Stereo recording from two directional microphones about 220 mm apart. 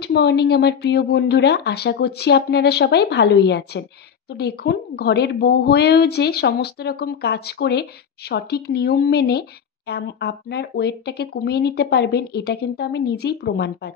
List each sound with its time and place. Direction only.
0.0 s speech: 50° left (ahead or behind)